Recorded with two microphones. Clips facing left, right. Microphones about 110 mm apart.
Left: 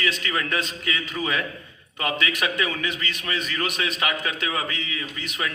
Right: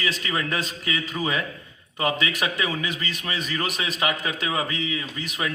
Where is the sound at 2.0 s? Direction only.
35° right (ahead or behind).